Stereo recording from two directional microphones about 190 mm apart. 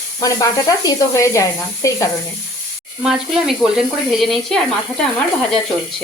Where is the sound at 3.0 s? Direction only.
5° right (ahead or behind).